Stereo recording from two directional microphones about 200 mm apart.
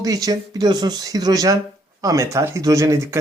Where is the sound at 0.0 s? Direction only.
20° right (ahead or behind).